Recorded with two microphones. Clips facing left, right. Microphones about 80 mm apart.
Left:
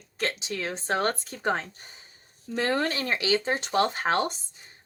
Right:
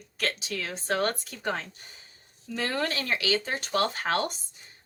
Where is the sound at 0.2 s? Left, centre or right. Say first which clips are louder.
Left 1 dB; left.